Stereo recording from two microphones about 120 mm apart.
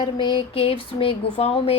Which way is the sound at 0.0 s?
40° left (ahead or behind).